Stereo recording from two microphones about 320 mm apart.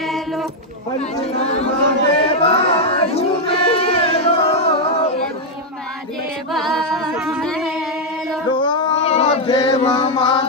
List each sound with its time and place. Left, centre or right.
0.0 s a sound: centre
2.1 s chant: centre
6.5 s music: centre
8.5 s chant: centre